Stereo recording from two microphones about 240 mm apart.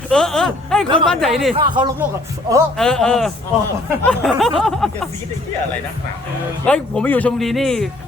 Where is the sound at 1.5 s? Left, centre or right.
Centre.